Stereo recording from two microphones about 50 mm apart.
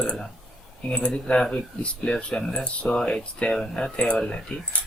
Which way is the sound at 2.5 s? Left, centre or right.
Left.